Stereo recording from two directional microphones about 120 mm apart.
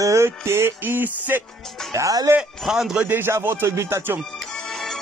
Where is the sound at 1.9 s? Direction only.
30° right (ahead or behind).